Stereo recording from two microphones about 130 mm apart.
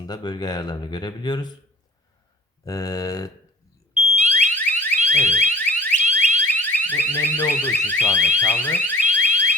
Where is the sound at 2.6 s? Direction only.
25° left (ahead or behind).